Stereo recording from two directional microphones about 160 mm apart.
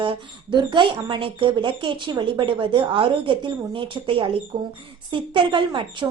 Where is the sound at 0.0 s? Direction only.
30° right (ahead or behind).